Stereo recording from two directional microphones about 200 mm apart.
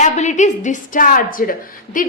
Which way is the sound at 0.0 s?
35° left (ahead or behind).